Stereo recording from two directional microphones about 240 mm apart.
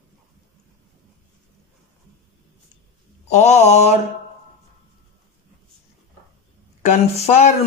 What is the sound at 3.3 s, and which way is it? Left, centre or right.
Speech, left.